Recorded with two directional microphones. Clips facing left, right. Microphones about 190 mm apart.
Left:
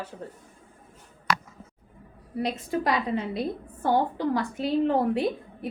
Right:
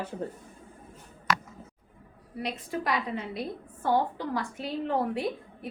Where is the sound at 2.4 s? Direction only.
35° left (ahead or behind).